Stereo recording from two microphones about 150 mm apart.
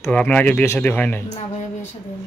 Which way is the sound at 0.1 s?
10° left (ahead or behind).